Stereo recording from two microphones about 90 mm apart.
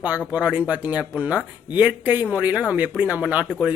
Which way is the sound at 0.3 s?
15° right (ahead or behind).